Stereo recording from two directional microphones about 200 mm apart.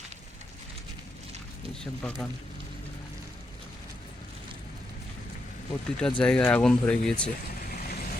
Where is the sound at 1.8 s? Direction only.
5° left (ahead or behind).